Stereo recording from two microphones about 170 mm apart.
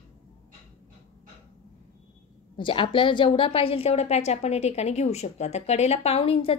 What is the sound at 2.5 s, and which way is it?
A woman's voice, 30° left (ahead or behind).